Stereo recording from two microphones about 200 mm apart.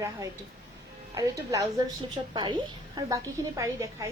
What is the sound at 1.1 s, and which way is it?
A woman's voice, 15° right (ahead or behind).